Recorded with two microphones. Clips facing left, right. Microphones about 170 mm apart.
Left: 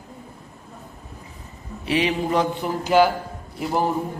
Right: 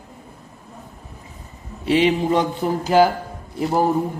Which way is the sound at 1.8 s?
25° right (ahead or behind).